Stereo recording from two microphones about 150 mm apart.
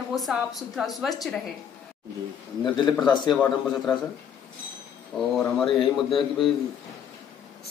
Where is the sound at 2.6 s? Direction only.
30° left (ahead or behind).